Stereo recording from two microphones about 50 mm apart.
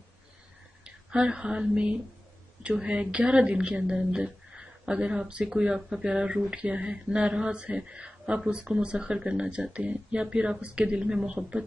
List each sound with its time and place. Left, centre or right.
0.8 s a woman's voice: centre